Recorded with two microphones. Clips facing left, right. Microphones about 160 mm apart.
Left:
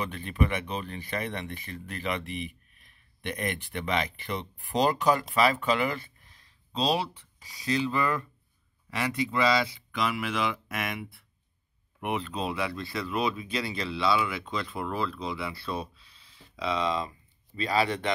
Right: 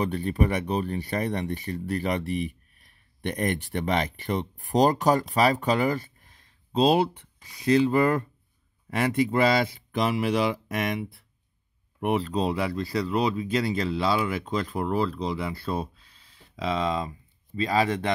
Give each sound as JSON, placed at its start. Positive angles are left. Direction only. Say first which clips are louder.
{"t": 0.0, "sound": "speech", "louder": "right 4 dB", "side_deg": -40}